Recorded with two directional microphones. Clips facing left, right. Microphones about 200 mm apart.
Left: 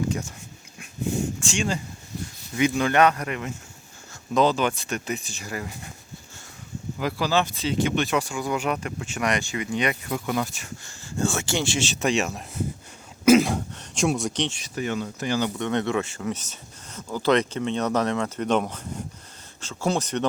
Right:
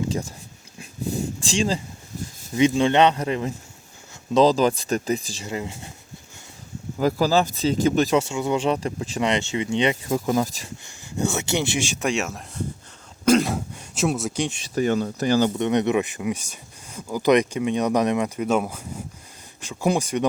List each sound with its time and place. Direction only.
1.4 s speech: 30° right (ahead or behind)
5.4 s speech: 25° right (ahead or behind)
7.0 s speech: 40° right (ahead or behind)
8.2 s speech: 25° right (ahead or behind)
10.1 s speech: 40° right (ahead or behind)
10.8 s speech: 20° right (ahead or behind)
14.6 s speech: 40° right (ahead or behind)
15.5 s speech: 20° right (ahead or behind)